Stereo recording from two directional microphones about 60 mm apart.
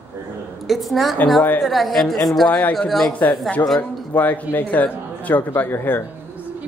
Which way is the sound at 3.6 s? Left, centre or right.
Left.